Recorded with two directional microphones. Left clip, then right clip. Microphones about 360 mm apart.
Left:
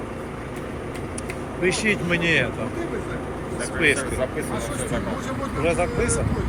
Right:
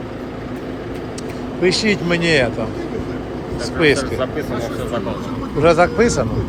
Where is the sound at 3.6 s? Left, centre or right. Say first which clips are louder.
Right 5 dB; centre.